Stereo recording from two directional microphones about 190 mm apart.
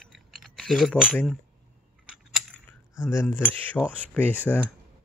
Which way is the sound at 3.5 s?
10° left (ahead or behind).